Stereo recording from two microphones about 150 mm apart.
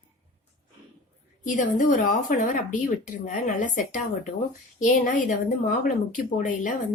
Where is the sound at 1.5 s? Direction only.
65° left (ahead or behind).